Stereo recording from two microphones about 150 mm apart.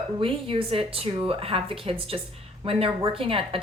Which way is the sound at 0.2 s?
35° right (ahead or behind).